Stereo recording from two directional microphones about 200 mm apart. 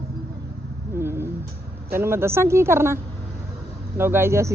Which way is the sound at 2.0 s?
10° right (ahead or behind).